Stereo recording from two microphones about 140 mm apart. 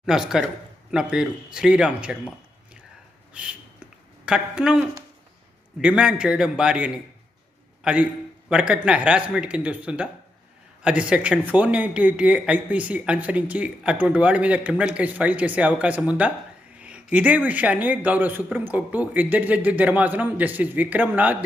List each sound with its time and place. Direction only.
0.0 s speech: 5° right (ahead or behind)
3.3 s a sound: 5° right (ahead or behind)
4.3 s speech: 5° right (ahead or behind)
5.8 s speech: 5° right (ahead or behind)